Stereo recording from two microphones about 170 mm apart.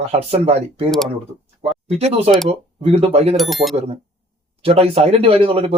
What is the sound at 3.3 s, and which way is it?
Speech, centre (ahead or behind).